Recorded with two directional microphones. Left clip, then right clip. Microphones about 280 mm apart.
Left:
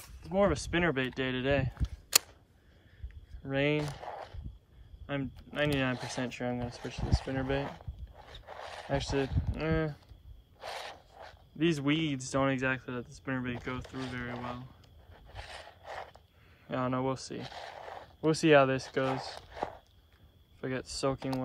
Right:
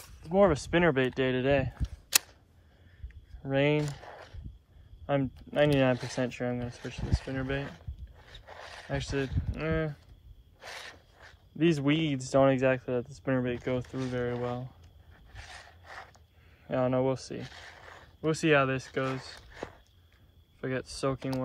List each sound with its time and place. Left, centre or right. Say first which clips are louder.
0.2 s speech: right 4 dB; centre
3.4 s speech: right 3 dB; centre
3.8 s zipper: left 1 dB; centre
5.0 s speech: right 7 dB; centre
10.6 s filing: left 2 dB; centre
11.5 s speech: right 3 dB; centre
15.1 s a sound: left 2 dB; left
16.6 s speech: right 5 dB; centre
17.4 s a sound: left 3 dB; left
18.2 s speech: left 2 dB; centre
20.6 s speech: right 1 dB; centre